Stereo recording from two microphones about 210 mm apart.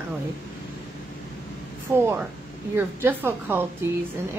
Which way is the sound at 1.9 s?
10° right (ahead or behind).